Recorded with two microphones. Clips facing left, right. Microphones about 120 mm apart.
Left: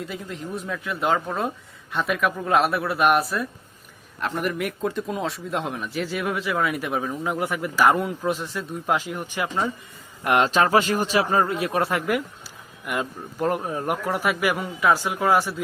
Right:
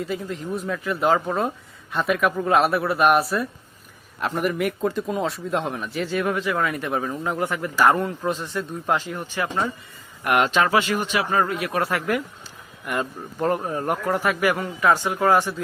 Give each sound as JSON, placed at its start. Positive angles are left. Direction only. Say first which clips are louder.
{"t": 0.0, "sound": "speech", "louder": "right 4 dB", "side_deg": 0}
{"t": 9.0, "sound": "speech", "louder": "right 1 dB", "side_deg": 15}
{"t": 10.2, "sound": "speech", "louder": "even", "side_deg": 30}
{"t": 12.8, "sound": "speech", "louder": "right 1 dB", "side_deg": 5}